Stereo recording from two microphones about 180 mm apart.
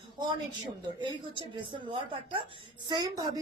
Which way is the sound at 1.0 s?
25° right (ahead or behind).